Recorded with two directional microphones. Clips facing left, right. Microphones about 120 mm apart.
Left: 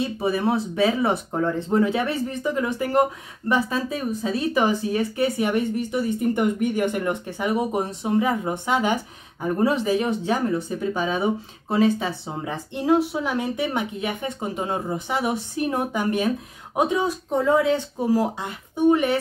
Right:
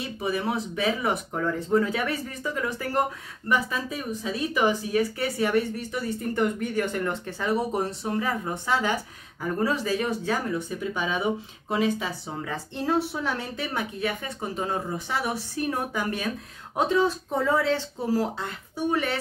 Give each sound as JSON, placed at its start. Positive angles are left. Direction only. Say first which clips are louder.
{"t": 0.0, "sound": "speech", "louder": "left 5 dB", "side_deg": 30}
{"t": 5.1, "sound": "speech", "louder": "left 2 dB", "side_deg": 20}
{"t": 10.9, "sound": "speech", "louder": "left 4 dB", "side_deg": 35}
{"t": 12.7, "sound": "speech", "louder": "left 6 dB", "side_deg": 15}